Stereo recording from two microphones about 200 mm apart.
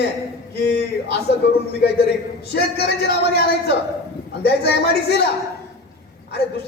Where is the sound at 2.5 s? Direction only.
55° left (ahead or behind).